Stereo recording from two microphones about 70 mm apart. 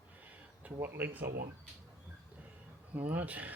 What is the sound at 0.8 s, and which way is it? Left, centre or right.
Speech, right.